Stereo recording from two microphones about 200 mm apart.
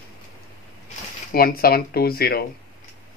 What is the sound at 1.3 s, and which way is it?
Speech, 45° left (ahead or behind).